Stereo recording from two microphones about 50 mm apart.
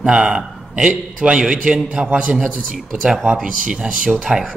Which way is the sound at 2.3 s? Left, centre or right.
Centre.